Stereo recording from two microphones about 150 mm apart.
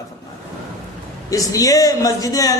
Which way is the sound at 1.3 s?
20° left (ahead or behind).